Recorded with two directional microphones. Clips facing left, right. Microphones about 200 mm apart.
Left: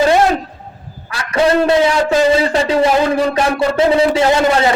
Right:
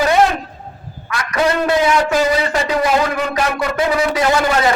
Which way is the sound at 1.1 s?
30° left (ahead or behind).